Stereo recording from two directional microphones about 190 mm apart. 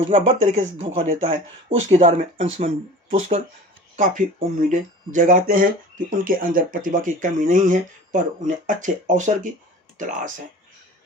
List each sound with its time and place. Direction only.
0.1 s speech: 35° right (ahead or behind)